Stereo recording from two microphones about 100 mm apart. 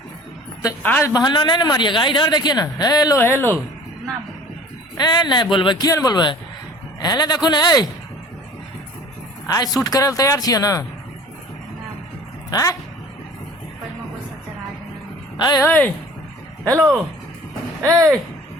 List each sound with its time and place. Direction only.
0.8 s speech: 20° left (ahead or behind)
1.0 s speech: 40° left (ahead or behind)
3.2 s speech: 20° left (ahead or behind)
4.9 s speech: 45° left (ahead or behind)
5.9 s speech: 40° left (ahead or behind)
9.5 s speech: 40° left (ahead or behind)
12.5 s speech: 35° left (ahead or behind)
15.4 s speech: 45° left (ahead or behind)
15.6 s speech: 15° left (ahead or behind)
17.8 s speech: 35° right (ahead or behind)